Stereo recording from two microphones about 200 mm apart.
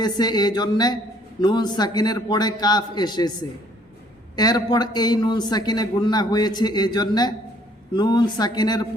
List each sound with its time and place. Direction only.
0.0 s a man's voice: 20° left (ahead or behind)
4.4 s a man's voice: 20° left (ahead or behind)